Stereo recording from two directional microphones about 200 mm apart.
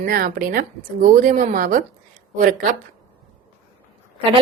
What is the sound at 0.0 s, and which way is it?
A woman's voice, 45° right (ahead or behind).